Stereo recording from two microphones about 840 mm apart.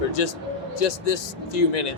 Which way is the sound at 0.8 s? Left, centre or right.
Left.